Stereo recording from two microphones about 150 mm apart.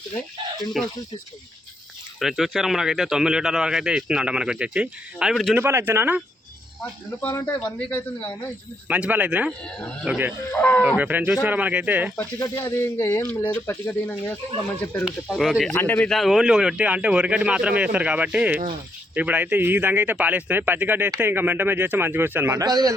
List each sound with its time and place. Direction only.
0.8 s speech: centre (ahead or behind)
2.1 s speech: centre (ahead or behind)
5.5 s speech: 15° right (ahead or behind)
7.2 s speech: 10° left (ahead or behind)
8.9 s speech: 10° right (ahead or behind)
9.5 s speech: 5° left (ahead or behind)
10.1 s speech: 10° right (ahead or behind)
10.5 s speech: 10° left (ahead or behind)
10.8 s speech: 10° right (ahead or behind)
12.4 s speech: 20° left (ahead or behind)
15.0 s speech: centre (ahead or behind)
15.7 s speech: 15° left (ahead or behind); by 22.6 s 15° right (ahead or behind)
22.6 s speech: 25° right (ahead or behind)